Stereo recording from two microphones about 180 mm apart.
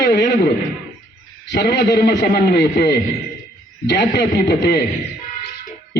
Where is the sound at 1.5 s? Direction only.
65° left (ahead or behind).